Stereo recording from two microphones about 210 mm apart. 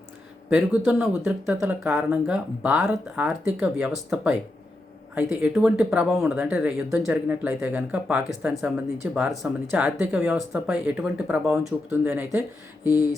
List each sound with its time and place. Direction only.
0.9 s speech: 10° right (ahead or behind)